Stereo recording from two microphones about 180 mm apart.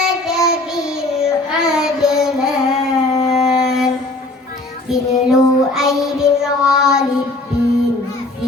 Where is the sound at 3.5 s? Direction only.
5° right (ahead or behind).